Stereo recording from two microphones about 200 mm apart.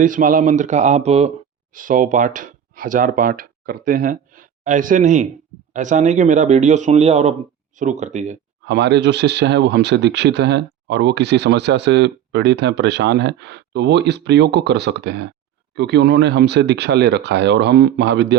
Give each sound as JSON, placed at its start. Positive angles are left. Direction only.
{"t": 0.0, "sound": "speech", "side_deg": -40}
{"t": 8.6, "sound": "speech", "side_deg": -60}